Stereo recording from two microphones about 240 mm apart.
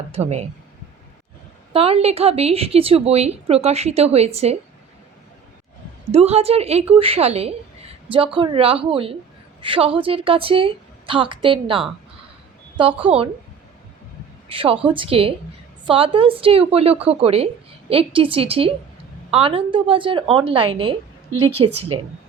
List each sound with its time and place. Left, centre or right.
0.1 s a woman's voice: right
1.7 s a woman's voice: right
6.1 s a woman's voice: right
13.1 s a woman's voice: right
14.5 s a woman's voice: right